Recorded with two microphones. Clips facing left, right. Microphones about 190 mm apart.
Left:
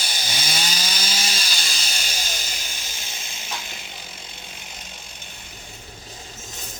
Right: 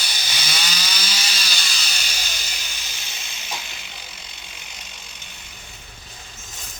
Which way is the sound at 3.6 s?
50° left (ahead or behind).